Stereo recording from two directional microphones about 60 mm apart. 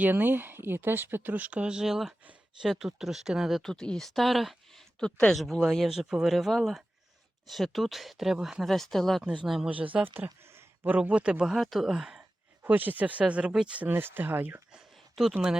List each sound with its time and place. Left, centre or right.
0.0 s speech: right; by 3.6 s centre
3.6 s speech: centre
4.9 s speech: centre
5.4 s speech: centre
8.7 s speech: centre
9.6 s speech: right
10.4 s a sound: right
10.8 s speech: right
11.1 s speech: centre
12.6 s speech: right
13.8 s speech: right
14.9 s a sound: centre